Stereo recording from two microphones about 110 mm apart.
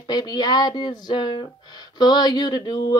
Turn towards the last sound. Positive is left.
turn(degrees=40)  # may be behind; listen again after turning